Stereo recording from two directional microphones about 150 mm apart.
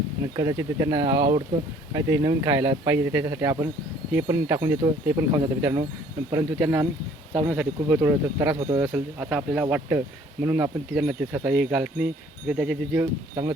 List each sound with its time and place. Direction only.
0.3 s speech: 20° right (ahead or behind)
6.3 s speech: 15° right (ahead or behind)
8.9 s speech: 10° right (ahead or behind)